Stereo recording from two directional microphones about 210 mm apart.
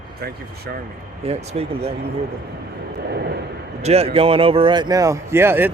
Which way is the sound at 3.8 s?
30° right (ahead or behind).